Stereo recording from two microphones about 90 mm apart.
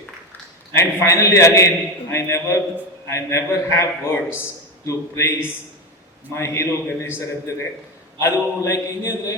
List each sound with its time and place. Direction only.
0.7 s a man's voice: 35° left (ahead or behind)
8.2 s a man's voice: 35° left (ahead or behind)